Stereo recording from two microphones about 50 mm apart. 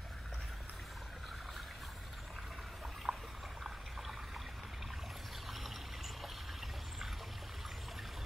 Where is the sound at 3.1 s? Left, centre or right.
Centre.